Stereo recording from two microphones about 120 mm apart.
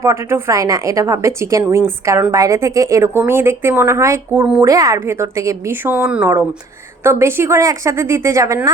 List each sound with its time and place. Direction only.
0.0 s a woman's voice: 20° right (ahead or behind)